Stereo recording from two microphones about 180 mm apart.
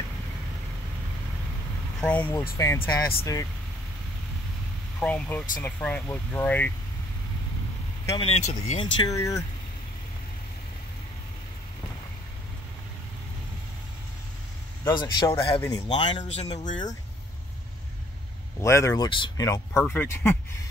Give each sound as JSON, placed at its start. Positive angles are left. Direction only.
{"t": 2.0, "sound": "speech", "side_deg": 5}
{"t": 5.0, "sound": "speech", "side_deg": 5}
{"t": 8.2, "sound": "speech", "side_deg": 30}
{"t": 9.0, "sound": "speech", "side_deg": 20}
{"t": 14.9, "sound": "speech", "side_deg": 25}
{"t": 16.3, "sound": "speech", "side_deg": 40}
{"t": 18.6, "sound": "speech", "side_deg": 15}
{"t": 19.0, "sound": "speech", "side_deg": 25}